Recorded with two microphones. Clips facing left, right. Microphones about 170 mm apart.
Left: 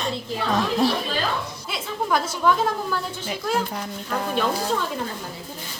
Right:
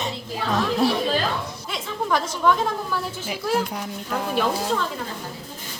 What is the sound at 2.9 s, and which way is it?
Speech, 5° right (ahead or behind).